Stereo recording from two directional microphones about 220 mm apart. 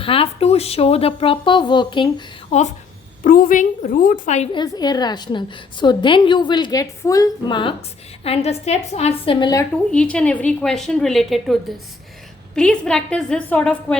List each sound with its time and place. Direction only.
0.0 s a woman's voice: 25° left (ahead or behind)
4.5 s a woman's voice: 20° left (ahead or behind)
9.9 s a woman's voice: 5° left (ahead or behind)
12.5 s a woman's voice: 5° left (ahead or behind)